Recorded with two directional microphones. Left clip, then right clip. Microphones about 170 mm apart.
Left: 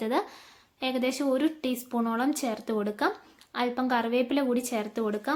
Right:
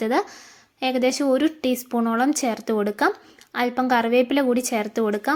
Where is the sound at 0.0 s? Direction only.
30° right (ahead or behind).